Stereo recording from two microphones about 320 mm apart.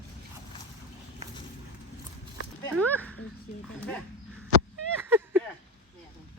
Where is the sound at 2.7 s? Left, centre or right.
Centre.